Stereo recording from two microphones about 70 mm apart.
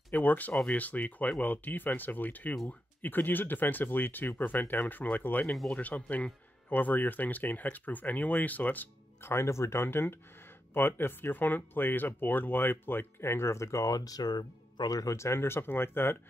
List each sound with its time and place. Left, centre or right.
0.1 s speech: left
9.2 s speech: left
15.1 s speech: left